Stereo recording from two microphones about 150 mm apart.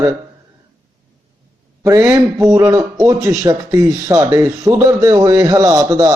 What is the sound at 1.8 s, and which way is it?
A man's voice, 20° right (ahead or behind).